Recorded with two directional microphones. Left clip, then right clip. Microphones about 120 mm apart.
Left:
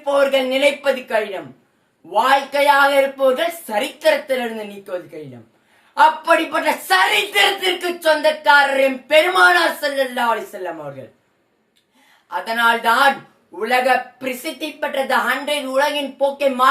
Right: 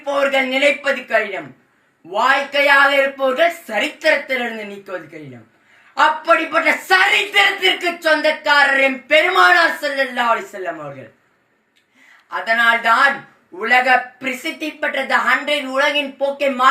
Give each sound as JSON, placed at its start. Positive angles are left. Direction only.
{"t": 0.0, "sound": "speech", "side_deg": 45}
{"t": 12.3, "sound": "speech", "side_deg": 45}